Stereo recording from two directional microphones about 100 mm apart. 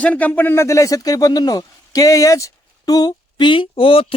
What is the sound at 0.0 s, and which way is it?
Speech, 15° left (ahead or behind).